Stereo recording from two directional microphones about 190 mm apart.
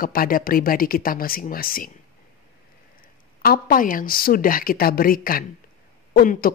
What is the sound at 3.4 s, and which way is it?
Speech, 50° left (ahead or behind).